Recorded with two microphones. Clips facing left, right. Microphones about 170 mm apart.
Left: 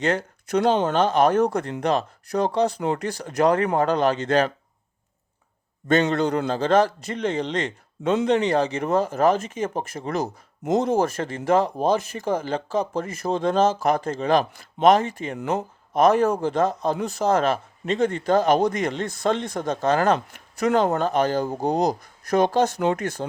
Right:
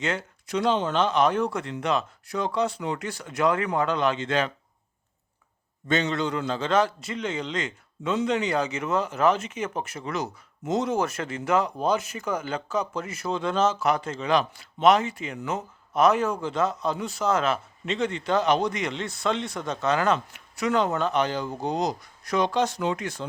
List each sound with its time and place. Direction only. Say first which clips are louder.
0.0 s speech: left 6 dB; 40° left (ahead or behind)
5.9 s a man's voice: left 5 dB; 50° left (ahead or behind)